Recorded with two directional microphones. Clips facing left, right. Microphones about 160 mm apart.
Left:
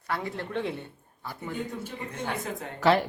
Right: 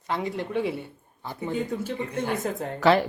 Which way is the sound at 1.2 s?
25° right (ahead or behind).